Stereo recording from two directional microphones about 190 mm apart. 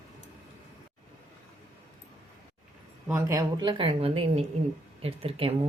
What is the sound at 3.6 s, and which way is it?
A woman's voice, 25° right (ahead or behind).